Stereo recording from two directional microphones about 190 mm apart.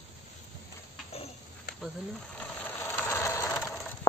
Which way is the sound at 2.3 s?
10° left (ahead or behind).